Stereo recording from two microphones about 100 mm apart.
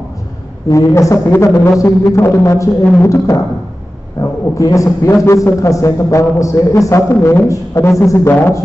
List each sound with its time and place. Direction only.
0.7 s a man's voice: 30° left (ahead or behind)